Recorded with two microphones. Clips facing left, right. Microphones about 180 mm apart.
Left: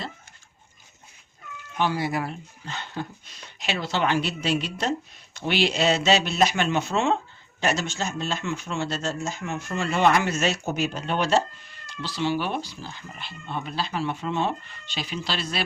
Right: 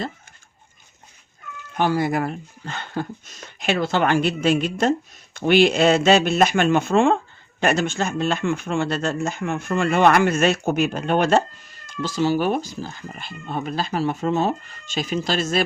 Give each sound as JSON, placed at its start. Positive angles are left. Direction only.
{"t": 1.7, "sound": "speech", "side_deg": -50}